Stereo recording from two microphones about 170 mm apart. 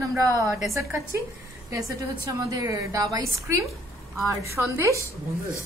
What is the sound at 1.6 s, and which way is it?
A woman's voice, 20° right (ahead or behind).